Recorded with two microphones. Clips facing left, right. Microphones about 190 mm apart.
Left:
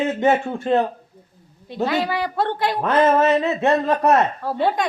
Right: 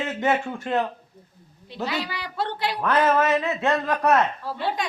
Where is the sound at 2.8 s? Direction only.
20° left (ahead or behind).